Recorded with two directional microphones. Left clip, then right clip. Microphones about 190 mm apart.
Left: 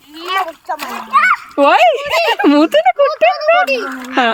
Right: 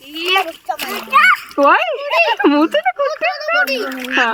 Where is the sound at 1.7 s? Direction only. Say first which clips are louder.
Left 4 dB; 55° left (ahead or behind).